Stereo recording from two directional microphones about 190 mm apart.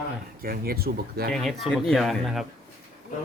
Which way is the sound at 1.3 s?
Centre (ahead or behind).